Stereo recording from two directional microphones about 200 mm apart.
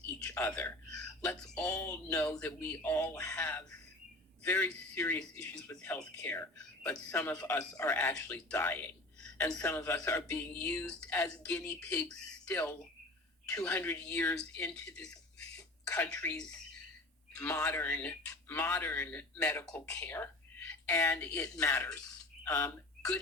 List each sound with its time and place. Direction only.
0.0 s a sound: 15° left (ahead or behind)
1.2 s speech: 10° left (ahead or behind)
16.1 s speech: 15° left (ahead or behind)